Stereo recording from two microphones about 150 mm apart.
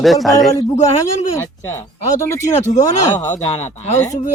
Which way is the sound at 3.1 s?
50° left (ahead or behind).